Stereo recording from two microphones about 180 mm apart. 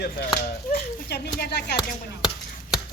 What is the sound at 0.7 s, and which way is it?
Speech, 60° left (ahead or behind).